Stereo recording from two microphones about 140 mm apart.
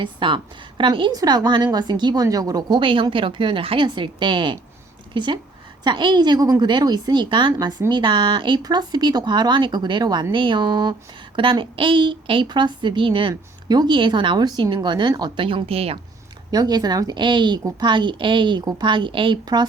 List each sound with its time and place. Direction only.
0.0 s a woman's voice: 35° right (ahead or behind)
16.5 s a woman's voice: 30° right (ahead or behind)